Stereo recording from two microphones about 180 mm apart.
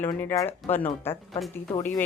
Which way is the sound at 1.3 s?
Centre (ahead or behind).